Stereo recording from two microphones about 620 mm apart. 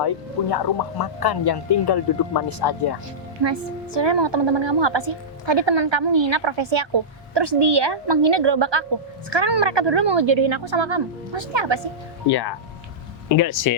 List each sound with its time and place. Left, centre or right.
0.5 s speech: left
3.4 s a woman's voice: right
12.3 s speech: left